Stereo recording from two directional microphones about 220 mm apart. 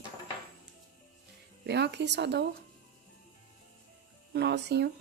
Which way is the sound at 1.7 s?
50° right (ahead or behind).